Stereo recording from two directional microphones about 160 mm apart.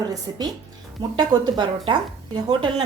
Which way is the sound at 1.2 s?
25° right (ahead or behind).